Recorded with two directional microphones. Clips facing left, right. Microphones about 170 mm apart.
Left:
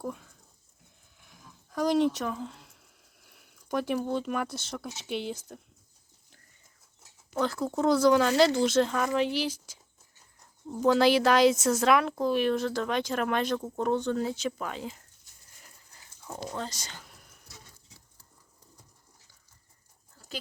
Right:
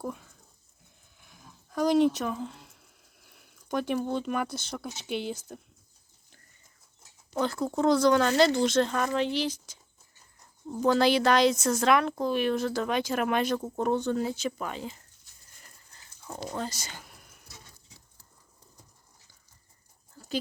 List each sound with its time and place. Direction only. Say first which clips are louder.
0.0 s a sound: even; 5° right (ahead or behind)
3.2 s speech: even; centre (ahead or behind)
7.3 s speech: right 1 dB; centre (ahead or behind)
15.6 s a sound: even; 5° left (ahead or behind)
16.4 s speech: right 2 dB; 5° right (ahead or behind)
20.1 s dog: right 9 dB; 20° right (ahead or behind)